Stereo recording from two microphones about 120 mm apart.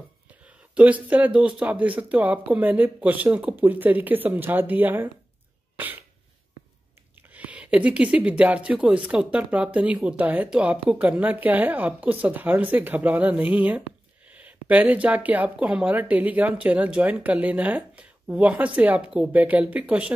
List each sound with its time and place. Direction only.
0.5 s speech: 10° right (ahead or behind)
5.8 s cough: 15° right (ahead or behind)
7.2 s speech: 15° right (ahead or behind)